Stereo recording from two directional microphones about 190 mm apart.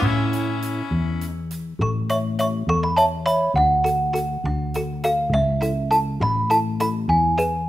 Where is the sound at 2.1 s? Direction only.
Centre (ahead or behind).